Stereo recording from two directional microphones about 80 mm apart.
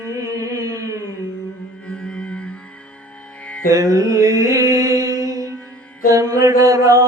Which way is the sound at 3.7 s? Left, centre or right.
Right.